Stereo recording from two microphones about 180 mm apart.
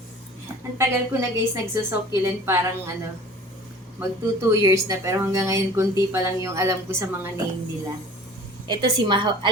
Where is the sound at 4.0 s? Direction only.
15° right (ahead or behind).